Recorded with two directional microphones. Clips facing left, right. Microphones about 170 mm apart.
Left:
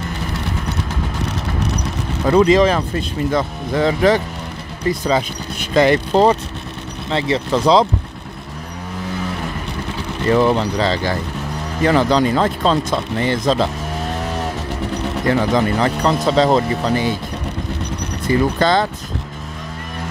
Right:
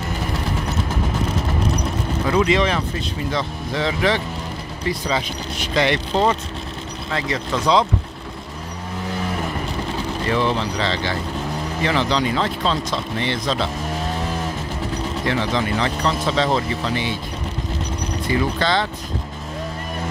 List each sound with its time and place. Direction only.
2.2 s speech: 40° left (ahead or behind)
7.1 s speech: 30° left (ahead or behind)
10.3 s speech: 40° left (ahead or behind)
15.2 s speech: 40° left (ahead or behind)
18.2 s speech: 45° left (ahead or behind)